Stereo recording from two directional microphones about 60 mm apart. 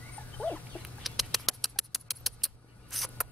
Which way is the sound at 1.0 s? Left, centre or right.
Centre.